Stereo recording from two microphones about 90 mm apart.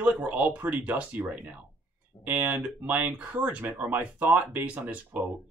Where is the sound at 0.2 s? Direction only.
15° right (ahead or behind).